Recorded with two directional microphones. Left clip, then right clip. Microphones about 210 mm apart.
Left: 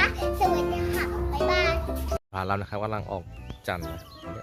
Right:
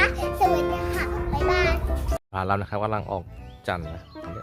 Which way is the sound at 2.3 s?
Centre (ahead or behind).